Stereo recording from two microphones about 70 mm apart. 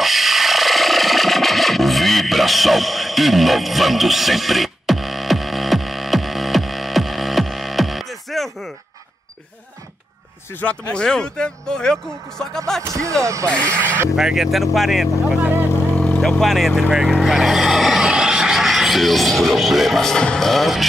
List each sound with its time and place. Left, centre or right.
0.0 s rub: centre
10.6 s speech: centre
12.8 s speech: right
14.1 s speech: centre
15.2 s speech: right
16.2 s speech: centre
16.7 s speech: centre
17.0 s speech: centre